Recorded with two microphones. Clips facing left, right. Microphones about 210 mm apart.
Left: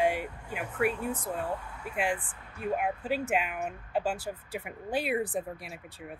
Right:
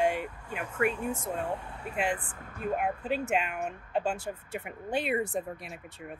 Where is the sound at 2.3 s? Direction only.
45° right (ahead or behind).